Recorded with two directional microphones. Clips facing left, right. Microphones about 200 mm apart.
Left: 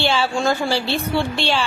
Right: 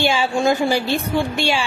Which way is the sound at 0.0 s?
15° right (ahead or behind).